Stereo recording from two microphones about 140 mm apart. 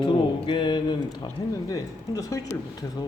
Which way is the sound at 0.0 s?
35° left (ahead or behind).